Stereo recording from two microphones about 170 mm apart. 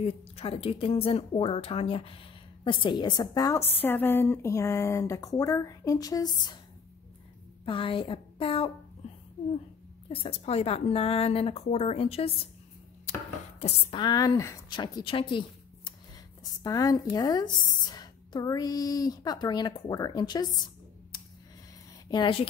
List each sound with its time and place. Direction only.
0.0 s a woman's voice: 35° left (ahead or behind)
7.6 s a woman's voice: 30° left (ahead or behind)
10.0 s a woman's voice: 35° left (ahead or behind)
13.6 s a woman's voice: 35° left (ahead or behind)
22.1 s a woman's voice: 30° left (ahead or behind)